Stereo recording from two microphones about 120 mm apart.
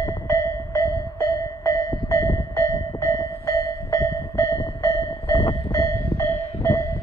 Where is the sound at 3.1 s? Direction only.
25° left (ahead or behind).